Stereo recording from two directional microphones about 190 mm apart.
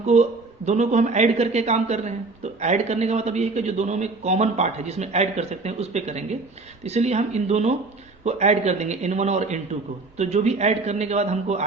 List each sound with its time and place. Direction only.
0.0 s speech: 35° right (ahead or behind)